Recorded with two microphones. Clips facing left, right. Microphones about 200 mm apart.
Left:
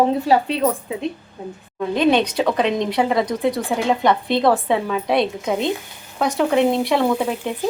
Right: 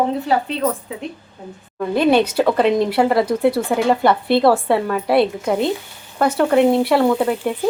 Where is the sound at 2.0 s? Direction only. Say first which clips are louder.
Right 2 dB; 5° right (ahead or behind).